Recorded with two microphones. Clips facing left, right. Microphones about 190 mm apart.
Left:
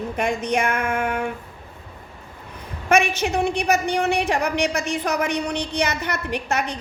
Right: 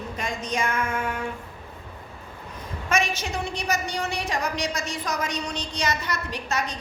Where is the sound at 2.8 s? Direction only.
65° left (ahead or behind).